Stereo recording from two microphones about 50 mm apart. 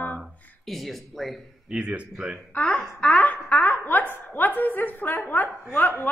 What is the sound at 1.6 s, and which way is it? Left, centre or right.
Speech, right.